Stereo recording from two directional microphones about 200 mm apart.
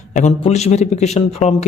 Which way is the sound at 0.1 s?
35° left (ahead or behind).